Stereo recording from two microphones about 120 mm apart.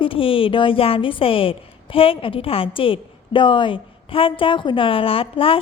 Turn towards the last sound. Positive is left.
turn(degrees=50)  # may be behind; listen again after turning